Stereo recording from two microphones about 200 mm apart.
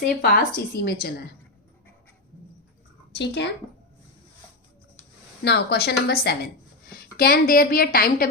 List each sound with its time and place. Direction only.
0.2 s a woman's voice: 50° left (ahead or behind)
3.2 s speech: 55° left (ahead or behind)
5.4 s a woman's voice: 55° left (ahead or behind)